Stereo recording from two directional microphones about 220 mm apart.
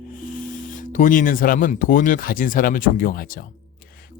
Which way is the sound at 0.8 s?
35° left (ahead or behind).